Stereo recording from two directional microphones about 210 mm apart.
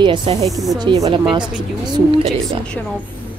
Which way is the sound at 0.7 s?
25° right (ahead or behind).